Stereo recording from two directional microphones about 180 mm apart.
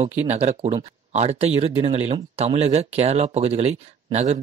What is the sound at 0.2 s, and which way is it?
Speech, 40° right (ahead or behind).